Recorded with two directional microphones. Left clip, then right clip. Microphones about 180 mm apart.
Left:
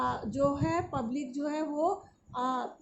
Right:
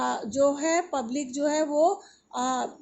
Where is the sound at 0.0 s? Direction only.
20° right (ahead or behind).